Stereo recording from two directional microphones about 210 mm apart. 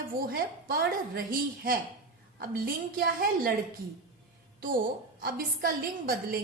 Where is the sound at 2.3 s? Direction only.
45° right (ahead or behind).